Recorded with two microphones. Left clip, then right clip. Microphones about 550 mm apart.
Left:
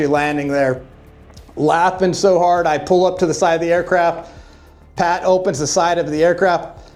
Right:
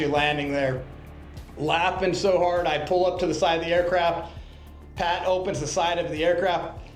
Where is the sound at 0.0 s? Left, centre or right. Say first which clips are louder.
Left 6 dB; left.